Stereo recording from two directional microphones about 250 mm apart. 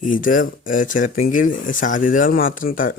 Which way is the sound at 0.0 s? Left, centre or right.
Left.